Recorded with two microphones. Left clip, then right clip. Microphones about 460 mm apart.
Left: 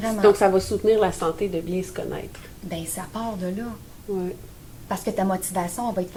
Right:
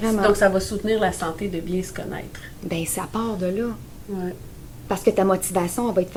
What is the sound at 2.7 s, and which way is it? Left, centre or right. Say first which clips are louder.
Speech: right 5 dB; right.